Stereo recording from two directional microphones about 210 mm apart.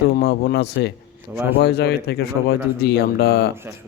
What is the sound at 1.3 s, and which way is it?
Speech, 10° right (ahead or behind).